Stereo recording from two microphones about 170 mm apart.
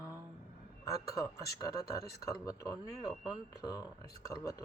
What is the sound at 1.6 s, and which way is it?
Speech, 20° left (ahead or behind).